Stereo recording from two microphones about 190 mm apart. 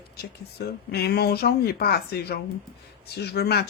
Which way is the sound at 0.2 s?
55° left (ahead or behind).